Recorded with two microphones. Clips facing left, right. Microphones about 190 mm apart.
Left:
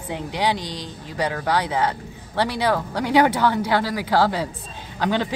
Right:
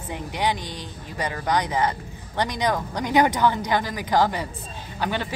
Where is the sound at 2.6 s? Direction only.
15° right (ahead or behind).